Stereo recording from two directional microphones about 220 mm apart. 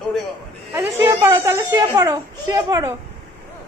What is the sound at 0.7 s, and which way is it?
Speech, 15° right (ahead or behind).